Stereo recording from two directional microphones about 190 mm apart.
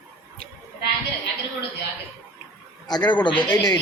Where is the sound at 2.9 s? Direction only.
25° left (ahead or behind).